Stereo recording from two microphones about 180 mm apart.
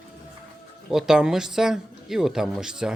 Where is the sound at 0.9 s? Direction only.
5° right (ahead or behind).